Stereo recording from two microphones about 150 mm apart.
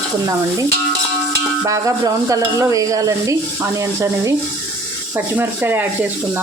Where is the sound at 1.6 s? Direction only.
20° right (ahead or behind).